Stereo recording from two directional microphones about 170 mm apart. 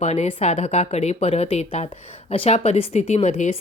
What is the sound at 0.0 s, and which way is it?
Speech, 40° left (ahead or behind).